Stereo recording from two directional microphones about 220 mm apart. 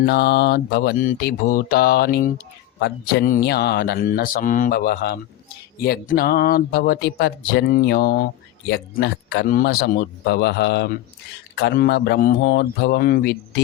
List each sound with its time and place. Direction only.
0.0 s speech: 50° left (ahead or behind)